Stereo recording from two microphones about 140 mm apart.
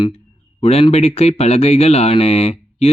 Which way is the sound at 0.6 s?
45° left (ahead or behind).